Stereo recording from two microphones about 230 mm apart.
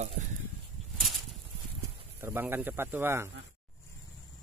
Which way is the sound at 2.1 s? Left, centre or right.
Centre.